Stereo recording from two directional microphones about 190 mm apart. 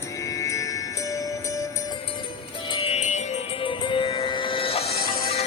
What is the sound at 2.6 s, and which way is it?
Music, 25° left (ahead or behind).